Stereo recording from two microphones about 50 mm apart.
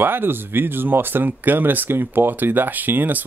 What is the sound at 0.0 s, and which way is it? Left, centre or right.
Speech, right.